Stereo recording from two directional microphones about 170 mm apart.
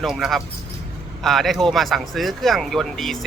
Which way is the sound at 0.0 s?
Centre (ahead or behind).